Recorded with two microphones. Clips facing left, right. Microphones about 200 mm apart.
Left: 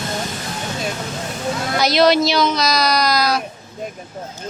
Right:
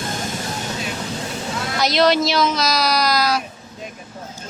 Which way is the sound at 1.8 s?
Centre (ahead or behind).